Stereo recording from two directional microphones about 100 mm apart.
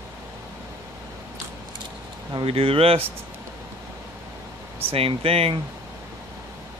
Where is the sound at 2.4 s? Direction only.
65° right (ahead or behind).